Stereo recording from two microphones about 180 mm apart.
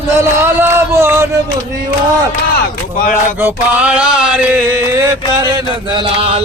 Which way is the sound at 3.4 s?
10° right (ahead or behind).